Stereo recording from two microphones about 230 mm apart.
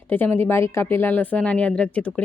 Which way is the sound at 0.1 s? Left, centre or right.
Centre.